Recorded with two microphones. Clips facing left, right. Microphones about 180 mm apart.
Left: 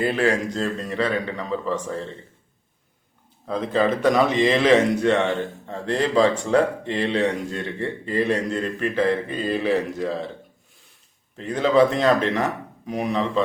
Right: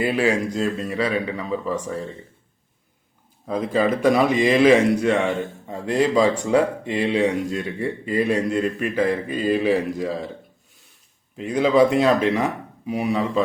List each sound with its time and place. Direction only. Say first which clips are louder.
0.0 s speech: right 1 dB; 10° right (ahead or behind)
3.4 s speech: right 1 dB; 10° right (ahead or behind)
11.3 s speech: right 1 dB; 10° right (ahead or behind)